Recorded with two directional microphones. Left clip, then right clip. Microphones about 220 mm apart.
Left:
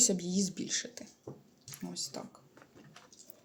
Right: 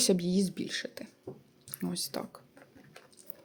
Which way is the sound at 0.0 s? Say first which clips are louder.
Right 3 dB; 30° right (ahead or behind).